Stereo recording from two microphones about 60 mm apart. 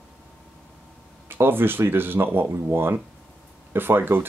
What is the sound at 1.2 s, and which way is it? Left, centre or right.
Speech, right.